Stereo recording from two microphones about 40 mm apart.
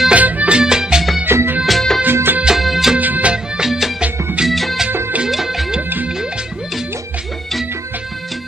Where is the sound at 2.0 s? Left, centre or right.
Right.